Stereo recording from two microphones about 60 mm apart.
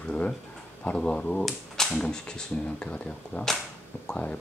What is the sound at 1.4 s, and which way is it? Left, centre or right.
Speech, centre.